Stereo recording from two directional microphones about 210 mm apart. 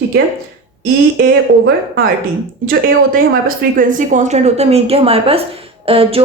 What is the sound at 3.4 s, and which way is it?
A woman's voice, 40° right (ahead or behind).